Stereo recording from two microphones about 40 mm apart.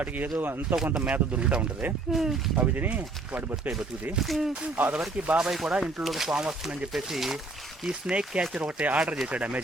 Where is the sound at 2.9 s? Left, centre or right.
Right.